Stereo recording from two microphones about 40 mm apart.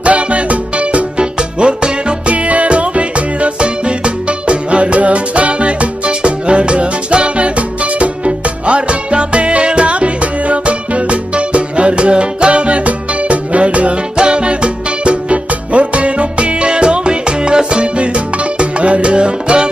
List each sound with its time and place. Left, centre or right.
0.0 s music: right
2.3 s music: right